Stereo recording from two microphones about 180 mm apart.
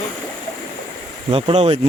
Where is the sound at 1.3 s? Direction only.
35° right (ahead or behind).